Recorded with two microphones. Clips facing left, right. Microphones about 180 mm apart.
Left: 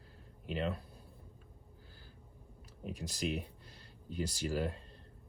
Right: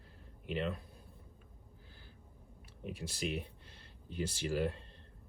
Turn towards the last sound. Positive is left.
turn(degrees=40)  # may be behind; listen again after turning